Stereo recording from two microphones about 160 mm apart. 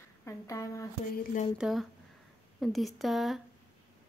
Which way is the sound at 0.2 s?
20° left (ahead or behind).